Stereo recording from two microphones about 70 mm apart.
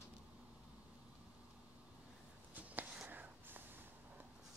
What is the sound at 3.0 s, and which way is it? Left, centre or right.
Whispering, right.